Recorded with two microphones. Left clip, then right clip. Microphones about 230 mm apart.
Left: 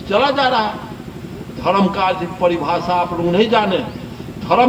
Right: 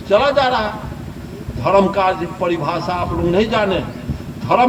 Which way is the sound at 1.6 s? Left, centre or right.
Right.